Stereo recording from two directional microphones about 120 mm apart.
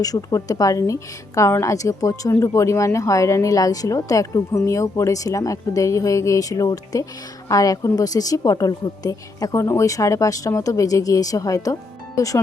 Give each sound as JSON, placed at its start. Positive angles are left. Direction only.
{"t": 0.0, "sound": "speech", "side_deg": 30}